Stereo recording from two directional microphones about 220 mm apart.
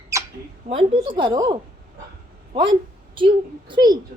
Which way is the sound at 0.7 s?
25° right (ahead or behind).